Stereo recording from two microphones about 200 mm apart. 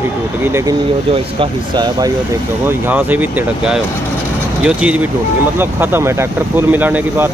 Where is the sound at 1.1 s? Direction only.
25° right (ahead or behind).